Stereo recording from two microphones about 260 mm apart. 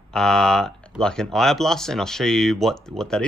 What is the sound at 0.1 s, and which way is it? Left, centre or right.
Speech, centre.